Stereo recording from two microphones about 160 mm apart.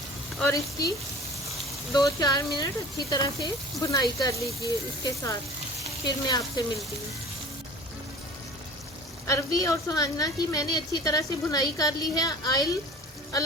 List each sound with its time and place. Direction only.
0.4 s a woman's voice: 20° left (ahead or behind)
2.0 s a woman's voice: 20° left (ahead or behind)
9.2 s a woman's voice: 20° left (ahead or behind)